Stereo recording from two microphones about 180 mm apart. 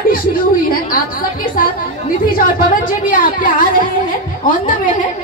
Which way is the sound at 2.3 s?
55° left (ahead or behind).